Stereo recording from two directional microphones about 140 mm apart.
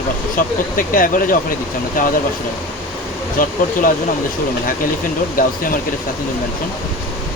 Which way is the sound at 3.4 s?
80° left.